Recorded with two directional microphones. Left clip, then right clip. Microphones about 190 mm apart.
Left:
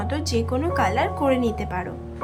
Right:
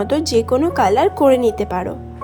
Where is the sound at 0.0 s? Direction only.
35° right (ahead or behind).